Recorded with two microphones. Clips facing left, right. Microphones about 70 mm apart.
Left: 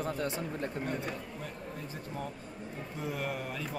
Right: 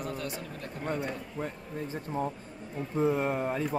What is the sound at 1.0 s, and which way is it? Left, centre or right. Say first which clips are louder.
Speech: right 4 dB; right.